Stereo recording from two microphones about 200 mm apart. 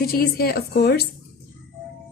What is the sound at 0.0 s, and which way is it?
A woman's voice, 50° left (ahead or behind).